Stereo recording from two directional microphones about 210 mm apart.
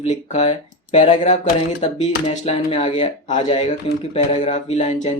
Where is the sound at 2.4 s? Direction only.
30° left (ahead or behind).